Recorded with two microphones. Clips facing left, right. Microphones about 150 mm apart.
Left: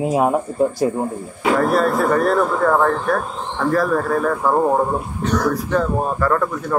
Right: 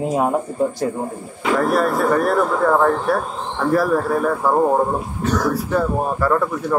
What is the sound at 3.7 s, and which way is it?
Speech, 10° right (ahead or behind).